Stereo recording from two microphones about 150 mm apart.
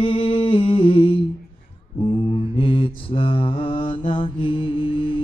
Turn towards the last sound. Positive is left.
turn(degrees=35)  # may be behind; listen again after turning